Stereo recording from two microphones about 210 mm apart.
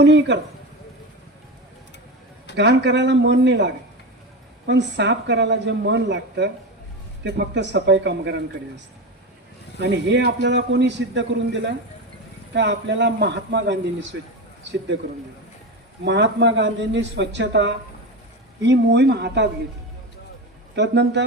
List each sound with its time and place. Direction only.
0.0 s speech: 55° right (ahead or behind)
2.6 s speech: 55° right (ahead or behind)
9.8 s speech: 55° right (ahead or behind)
16.0 s speech: 55° right (ahead or behind)
20.7 s speech: 55° right (ahead or behind)